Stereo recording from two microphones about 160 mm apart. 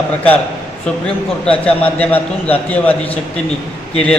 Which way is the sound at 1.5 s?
10° left (ahead or behind).